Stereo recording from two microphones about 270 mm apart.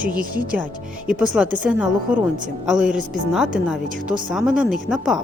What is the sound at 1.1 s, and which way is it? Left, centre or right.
A woman's voice, centre.